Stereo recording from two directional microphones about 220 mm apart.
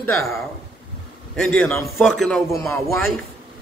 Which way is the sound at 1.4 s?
5° left (ahead or behind).